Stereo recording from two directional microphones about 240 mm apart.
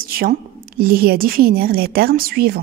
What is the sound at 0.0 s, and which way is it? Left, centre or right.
A woman's voice, right.